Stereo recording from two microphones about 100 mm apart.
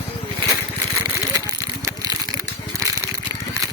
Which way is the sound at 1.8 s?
35° right (ahead or behind).